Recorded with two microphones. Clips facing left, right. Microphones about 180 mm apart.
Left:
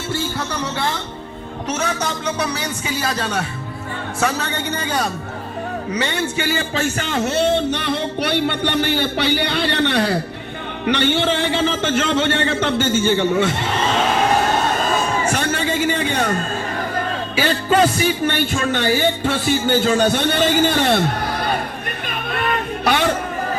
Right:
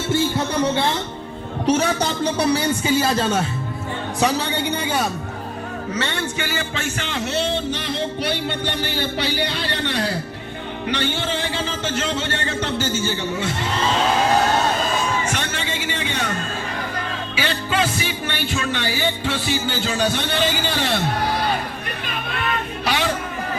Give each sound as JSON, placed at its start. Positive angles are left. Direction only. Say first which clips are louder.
{"t": 0.1, "sound": "music", "louder": "right 4 dB", "side_deg": -25}
{"t": 1.6, "sound": "a man's voice", "louder": "right 4 dB", "side_deg": -30}
{"t": 4.2, "sound": "a woman's voice", "louder": "right 1 dB", "side_deg": -15}
{"t": 6.5, "sound": "speech", "louder": "left 5 dB", "side_deg": 35}
{"t": 15.2, "sound": "music", "louder": "left 5 dB", "side_deg": 40}
{"t": 17.3, "sound": "music", "louder": "left 6 dB", "side_deg": 45}
{"t": 22.0, "sound": "music", "louder": "left 4 dB", "side_deg": 50}